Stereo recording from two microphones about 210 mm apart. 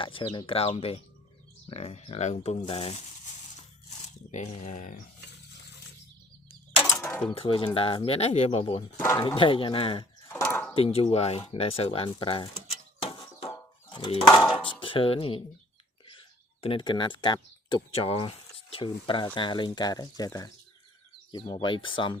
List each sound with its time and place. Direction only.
0.0 s speech: 25° left (ahead or behind)
4.3 s speech: 35° left (ahead or behind)
7.0 s mechanisms: 5° left (ahead or behind)
7.3 s speech: 25° left (ahead or behind)
9.0 s speech: 15° left (ahead or behind)
9.2 s speech: 25° left (ahead or behind)
10.4 s a sound: 10° left (ahead or behind)
10.8 s speech: 25° left (ahead or behind)
13.0 s a sound: 25° left (ahead or behind)
14.7 s speech: 25° left (ahead or behind)
16.6 s speech: 25° left (ahead or behind)